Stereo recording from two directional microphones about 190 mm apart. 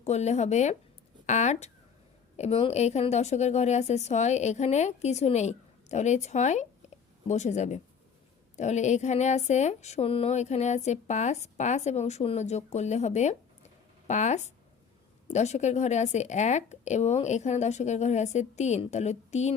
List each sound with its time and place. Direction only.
0.0 s speech: 35° left (ahead or behind)